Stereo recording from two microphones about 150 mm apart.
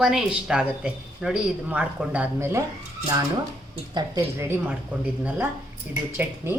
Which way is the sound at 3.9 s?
25° right (ahead or behind).